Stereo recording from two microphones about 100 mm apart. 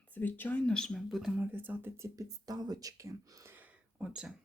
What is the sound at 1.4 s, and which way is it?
Speech, 20° right (ahead or behind).